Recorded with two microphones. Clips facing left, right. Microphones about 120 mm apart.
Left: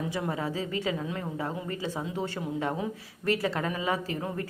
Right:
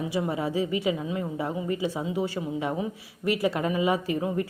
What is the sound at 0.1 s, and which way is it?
A woman's voice, 10° right (ahead or behind).